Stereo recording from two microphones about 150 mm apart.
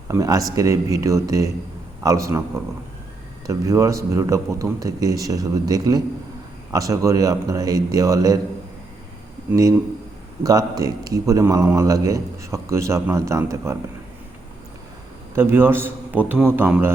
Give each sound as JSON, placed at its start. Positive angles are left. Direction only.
{"t": 0.1, "sound": "a man's voice", "side_deg": -20}
{"t": 3.4, "sound": "a man's voice", "side_deg": -20}
{"t": 9.5, "sound": "a man's voice", "side_deg": -20}
{"t": 15.4, "sound": "a man's voice", "side_deg": -15}